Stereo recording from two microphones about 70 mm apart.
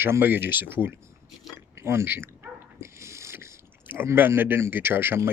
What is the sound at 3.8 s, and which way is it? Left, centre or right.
Speech, right.